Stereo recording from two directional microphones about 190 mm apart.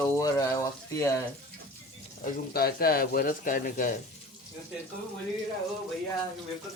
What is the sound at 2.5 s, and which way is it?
Speech, 50° left (ahead or behind).